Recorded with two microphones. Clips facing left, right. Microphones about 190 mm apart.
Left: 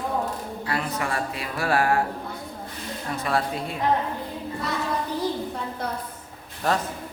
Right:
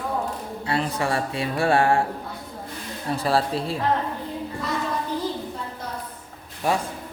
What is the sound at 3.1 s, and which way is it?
Speech, 30° right (ahead or behind).